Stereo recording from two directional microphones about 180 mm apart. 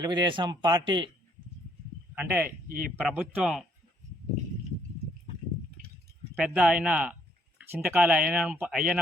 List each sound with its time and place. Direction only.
0.0 s speech: 25° right (ahead or behind)
2.1 s speech: 10° right (ahead or behind)
6.3 s speech: 5° right (ahead or behind)